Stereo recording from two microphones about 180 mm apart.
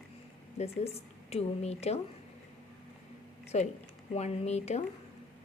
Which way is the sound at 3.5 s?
40° left (ahead or behind).